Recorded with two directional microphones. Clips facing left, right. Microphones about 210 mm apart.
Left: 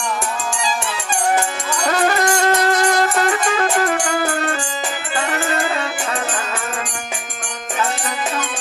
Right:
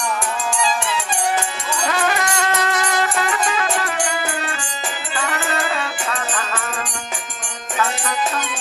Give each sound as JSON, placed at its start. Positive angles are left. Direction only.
{"t": 1.9, "sound": "music", "side_deg": 40}